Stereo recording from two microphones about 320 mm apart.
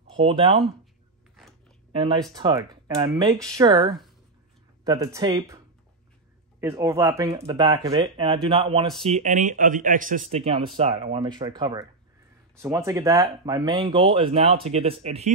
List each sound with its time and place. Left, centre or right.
0.1 s speech: centre
2.0 s speech: centre
4.8 s speech: centre
6.6 s speech: centre